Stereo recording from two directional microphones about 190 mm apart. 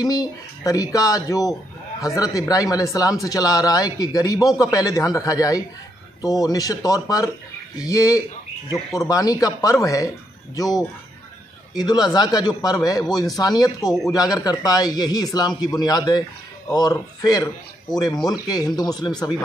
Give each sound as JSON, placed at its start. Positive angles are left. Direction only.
{"t": 0.0, "sound": "a man's voice", "side_deg": 20}
{"t": 11.7, "sound": "a man's voice", "side_deg": 20}